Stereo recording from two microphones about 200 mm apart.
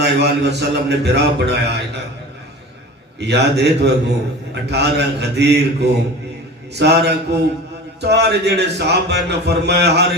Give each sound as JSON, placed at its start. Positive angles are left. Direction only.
{"t": 0.0, "sound": "a man's voice", "side_deg": -55}
{"t": 3.2, "sound": "a man's voice", "side_deg": -55}